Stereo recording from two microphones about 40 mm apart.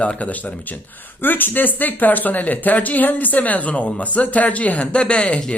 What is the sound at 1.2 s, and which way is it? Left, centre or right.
A man's voice, left.